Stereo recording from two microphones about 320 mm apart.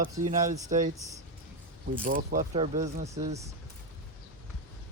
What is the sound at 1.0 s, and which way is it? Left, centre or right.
Speech, centre.